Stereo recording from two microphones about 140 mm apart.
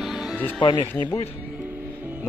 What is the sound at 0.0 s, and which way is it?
Music, 5° right (ahead or behind).